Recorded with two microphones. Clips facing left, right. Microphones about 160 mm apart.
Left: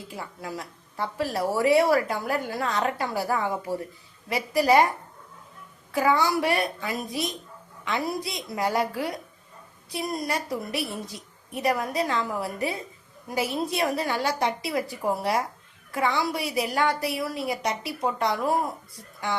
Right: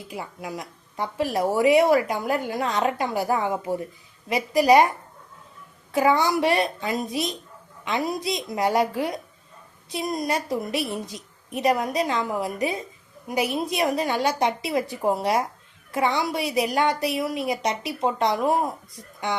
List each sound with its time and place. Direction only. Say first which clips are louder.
0.1 s a woman's voice: right 3 dB; 15° right (ahead or behind)
5.9 s a woman's voice: right 2 dB; 20° right (ahead or behind)